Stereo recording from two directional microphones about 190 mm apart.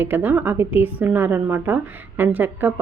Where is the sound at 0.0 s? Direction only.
10° right (ahead or behind).